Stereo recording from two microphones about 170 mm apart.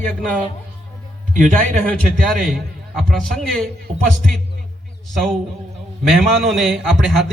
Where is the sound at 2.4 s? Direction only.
Centre (ahead or behind).